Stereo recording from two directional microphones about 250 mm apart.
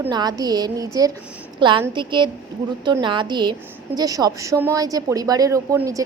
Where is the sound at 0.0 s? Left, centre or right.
Centre.